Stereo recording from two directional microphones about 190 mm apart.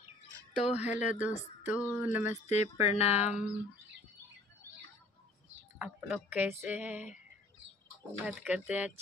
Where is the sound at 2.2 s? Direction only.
35° left (ahead or behind).